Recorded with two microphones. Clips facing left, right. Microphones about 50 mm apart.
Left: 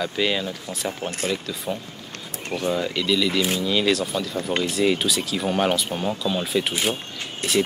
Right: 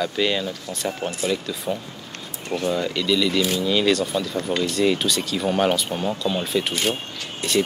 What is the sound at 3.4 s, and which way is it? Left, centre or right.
Speech, left.